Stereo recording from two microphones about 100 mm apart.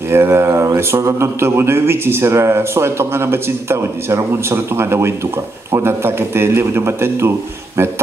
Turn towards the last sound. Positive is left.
turn(degrees=-25)  # may be behind; listen again after turning